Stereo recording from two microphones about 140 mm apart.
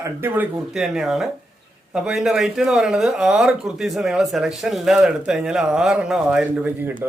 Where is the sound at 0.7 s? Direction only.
5° right (ahead or behind).